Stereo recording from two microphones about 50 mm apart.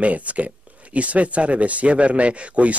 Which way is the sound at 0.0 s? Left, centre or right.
Right.